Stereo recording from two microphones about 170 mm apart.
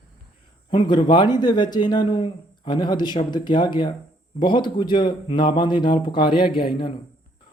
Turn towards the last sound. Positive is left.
turn(degrees=30)  # may be behind; listen again after turning